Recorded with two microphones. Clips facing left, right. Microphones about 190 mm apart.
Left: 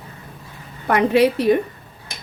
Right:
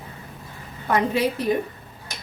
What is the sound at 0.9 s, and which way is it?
Speech, 70° left (ahead or behind).